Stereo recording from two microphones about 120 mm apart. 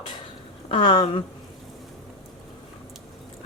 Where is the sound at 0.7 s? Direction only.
45° left (ahead or behind).